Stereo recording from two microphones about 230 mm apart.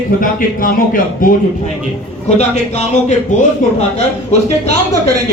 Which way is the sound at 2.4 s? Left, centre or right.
Left.